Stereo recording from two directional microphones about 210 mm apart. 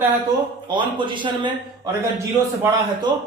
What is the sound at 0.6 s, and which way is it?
Speech, 20° right (ahead or behind).